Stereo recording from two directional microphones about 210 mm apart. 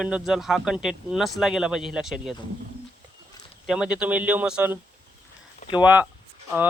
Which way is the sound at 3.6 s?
5° right (ahead or behind).